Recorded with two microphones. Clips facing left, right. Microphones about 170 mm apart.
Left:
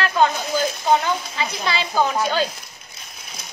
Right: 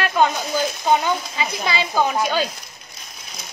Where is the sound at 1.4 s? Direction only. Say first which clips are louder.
Right 1 dB; 15° right (ahead or behind).